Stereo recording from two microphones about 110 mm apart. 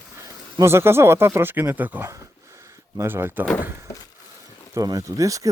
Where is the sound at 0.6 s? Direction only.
25° right (ahead or behind).